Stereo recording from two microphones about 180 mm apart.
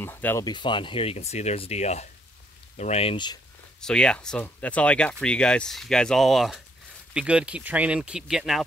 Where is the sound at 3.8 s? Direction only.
5° left (ahead or behind).